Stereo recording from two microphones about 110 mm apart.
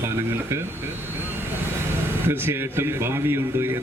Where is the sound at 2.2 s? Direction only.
20° right (ahead or behind).